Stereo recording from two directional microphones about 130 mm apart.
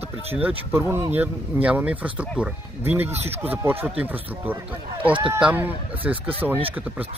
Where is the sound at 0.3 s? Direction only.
15° right (ahead or behind).